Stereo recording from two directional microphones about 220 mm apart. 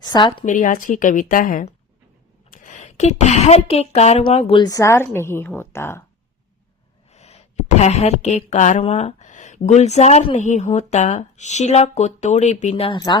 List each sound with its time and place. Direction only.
0.0 s a woman's voice: 20° left (ahead or behind)
0.4 s a woman's voice: 35° left (ahead or behind); by 6.0 s 10° left (ahead or behind)
7.1 s speech: 30° left (ahead or behind)